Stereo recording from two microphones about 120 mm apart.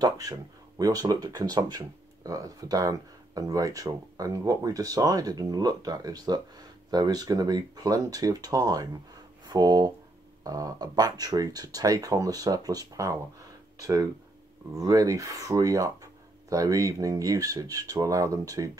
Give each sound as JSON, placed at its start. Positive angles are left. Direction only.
{"t": 0.0, "sound": "speech", "side_deg": -30}